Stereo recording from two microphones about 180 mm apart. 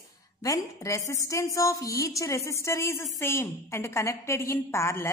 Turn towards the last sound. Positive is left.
turn(degrees=15)  # may be behind; listen again after turning